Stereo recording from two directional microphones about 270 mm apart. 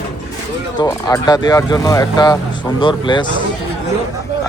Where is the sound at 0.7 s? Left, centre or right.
Centre.